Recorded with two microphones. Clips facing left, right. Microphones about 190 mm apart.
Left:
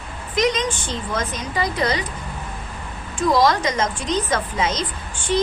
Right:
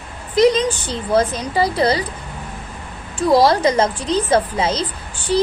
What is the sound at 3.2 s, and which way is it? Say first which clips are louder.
Speech: right 4 dB; 35° right (ahead or behind).